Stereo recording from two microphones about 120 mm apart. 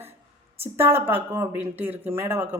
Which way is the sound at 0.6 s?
20° right (ahead or behind).